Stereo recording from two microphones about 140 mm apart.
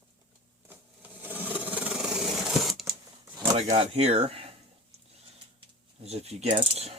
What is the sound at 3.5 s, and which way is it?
Speech, 45° right (ahead or behind).